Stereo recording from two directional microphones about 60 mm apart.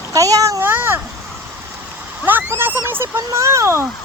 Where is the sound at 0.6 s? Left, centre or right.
Right.